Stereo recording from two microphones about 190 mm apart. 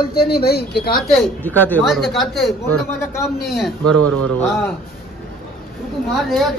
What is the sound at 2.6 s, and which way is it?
Speech, 15° left (ahead or behind).